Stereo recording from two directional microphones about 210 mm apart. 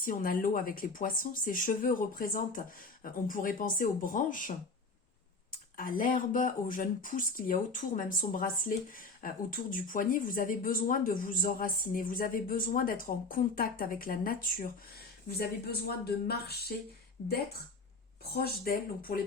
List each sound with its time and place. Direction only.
0.0 s speech: 40° left (ahead or behind)